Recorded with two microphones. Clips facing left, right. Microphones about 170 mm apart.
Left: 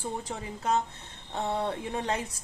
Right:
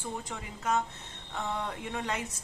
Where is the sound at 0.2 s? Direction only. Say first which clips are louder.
Left 3 dB; 35° left (ahead or behind).